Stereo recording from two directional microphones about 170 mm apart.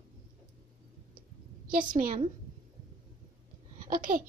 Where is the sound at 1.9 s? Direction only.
50° right (ahead or behind).